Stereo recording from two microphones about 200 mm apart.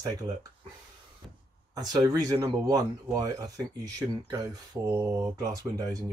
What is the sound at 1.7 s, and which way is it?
Speech, 20° right (ahead or behind).